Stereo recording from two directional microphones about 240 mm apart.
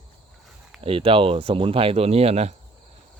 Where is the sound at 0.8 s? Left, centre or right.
Right.